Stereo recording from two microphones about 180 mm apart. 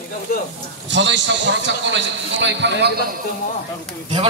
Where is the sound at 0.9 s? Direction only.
90° right; by 2.9 s 75° right (ahead or behind).